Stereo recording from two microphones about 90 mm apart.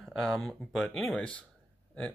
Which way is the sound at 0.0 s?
5° left (ahead or behind).